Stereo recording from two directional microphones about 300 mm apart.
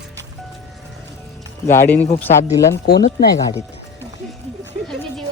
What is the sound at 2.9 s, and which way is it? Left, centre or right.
Speech, left.